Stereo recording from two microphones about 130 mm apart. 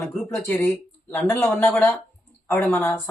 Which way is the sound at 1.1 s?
15° left (ahead or behind).